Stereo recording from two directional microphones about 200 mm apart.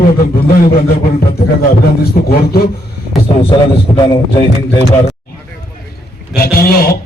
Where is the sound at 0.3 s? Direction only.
50° left (ahead or behind).